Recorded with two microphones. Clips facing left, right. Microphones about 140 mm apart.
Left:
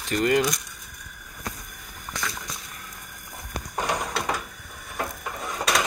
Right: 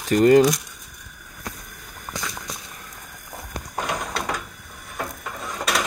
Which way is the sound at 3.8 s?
Centre (ahead or behind).